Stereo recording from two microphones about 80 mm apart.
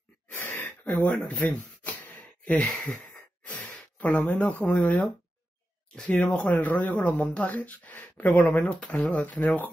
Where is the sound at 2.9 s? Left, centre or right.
Centre.